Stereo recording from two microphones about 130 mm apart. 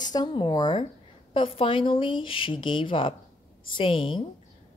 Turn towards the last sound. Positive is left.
turn(degrees=40)  # may be behind; listen again after turning